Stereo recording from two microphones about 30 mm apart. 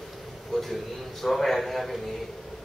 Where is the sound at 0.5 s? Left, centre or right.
Centre.